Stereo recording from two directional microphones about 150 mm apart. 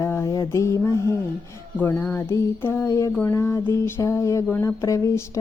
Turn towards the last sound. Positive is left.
turn(degrees=20)  # may be behind; listen again after turning